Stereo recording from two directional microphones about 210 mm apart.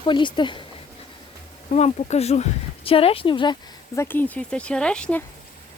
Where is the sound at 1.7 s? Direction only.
30° left (ahead or behind); by 5.2 s 5° left (ahead or behind).